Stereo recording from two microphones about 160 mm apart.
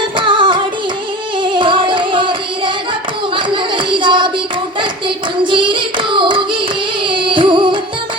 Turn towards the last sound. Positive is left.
turn(degrees=-30)  # may be behind; listen again after turning